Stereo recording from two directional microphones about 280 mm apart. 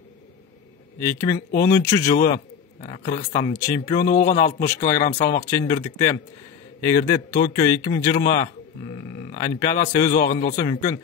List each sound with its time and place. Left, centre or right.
0.9 s a man's voice: centre
2.1 s a man's voice: left
3.5 s a man's voice: centre
4.0 s a man's voice: left
5.4 s a man's voice: centre
9.4 s a man's voice: centre
10.1 s a man's voice: left
10.7 s a man's voice: centre